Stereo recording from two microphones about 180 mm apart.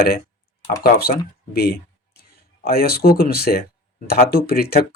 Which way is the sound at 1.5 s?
60° left (ahead or behind).